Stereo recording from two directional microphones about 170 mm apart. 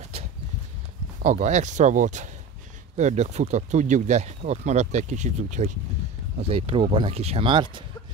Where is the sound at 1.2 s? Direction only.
45° right (ahead or behind).